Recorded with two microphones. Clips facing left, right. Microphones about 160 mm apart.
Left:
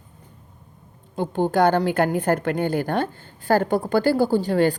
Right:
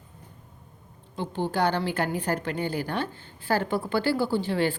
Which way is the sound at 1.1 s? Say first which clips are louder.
Left 7 dB; 50° left (ahead or behind).